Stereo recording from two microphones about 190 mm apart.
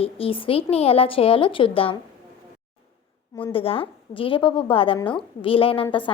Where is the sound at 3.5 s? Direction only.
30° left (ahead or behind).